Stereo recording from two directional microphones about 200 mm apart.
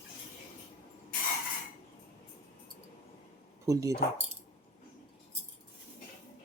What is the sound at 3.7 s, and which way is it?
Speech, 15° right (ahead or behind).